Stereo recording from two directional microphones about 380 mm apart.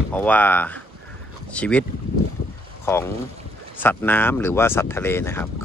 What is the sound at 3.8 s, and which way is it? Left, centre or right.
Speech, centre.